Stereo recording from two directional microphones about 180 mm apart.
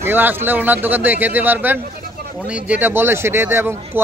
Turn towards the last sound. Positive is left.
turn(degrees=-15)  # may be behind; listen again after turning